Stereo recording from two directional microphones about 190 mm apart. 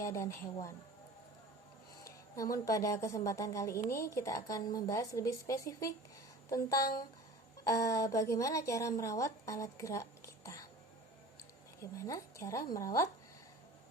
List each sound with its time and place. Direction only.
0.0 s a woman's voice: 15° left (ahead or behind)
2.0 s a sound: 15° left (ahead or behind)
2.6 s a woman's voice: 15° left (ahead or behind)
11.9 s a woman's voice: 15° left (ahead or behind)